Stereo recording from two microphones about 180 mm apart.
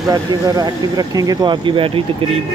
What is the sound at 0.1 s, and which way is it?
Speech, 20° right (ahead or behind).